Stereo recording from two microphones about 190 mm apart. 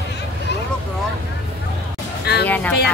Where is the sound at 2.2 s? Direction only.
60° left (ahead or behind).